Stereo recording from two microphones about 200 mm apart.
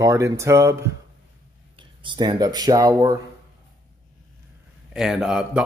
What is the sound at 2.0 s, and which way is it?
Speech, 20° right (ahead or behind).